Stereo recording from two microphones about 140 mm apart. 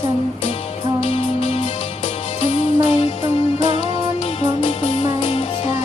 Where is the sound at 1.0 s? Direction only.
45° left (ahead or behind).